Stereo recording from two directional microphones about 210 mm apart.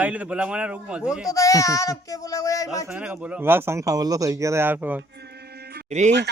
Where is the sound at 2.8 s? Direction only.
5° right (ahead or behind).